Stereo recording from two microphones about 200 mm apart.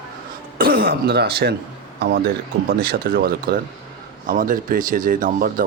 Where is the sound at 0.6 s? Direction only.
50° right (ahead or behind).